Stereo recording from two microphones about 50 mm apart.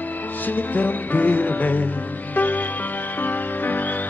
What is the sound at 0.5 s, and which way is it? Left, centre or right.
Music, left.